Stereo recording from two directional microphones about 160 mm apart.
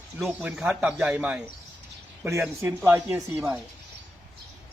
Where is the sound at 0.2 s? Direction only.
5° right (ahead or behind).